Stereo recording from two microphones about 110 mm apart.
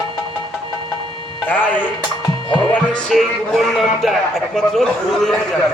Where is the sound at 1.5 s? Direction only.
15° left (ahead or behind).